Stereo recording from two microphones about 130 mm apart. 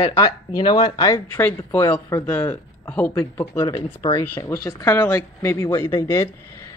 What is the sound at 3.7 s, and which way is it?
Speech, 30° left (ahead or behind).